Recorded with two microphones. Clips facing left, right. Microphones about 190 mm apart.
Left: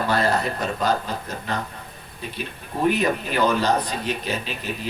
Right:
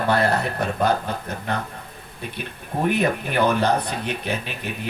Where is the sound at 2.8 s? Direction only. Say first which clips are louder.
Left 1 dB; 55° right (ahead or behind).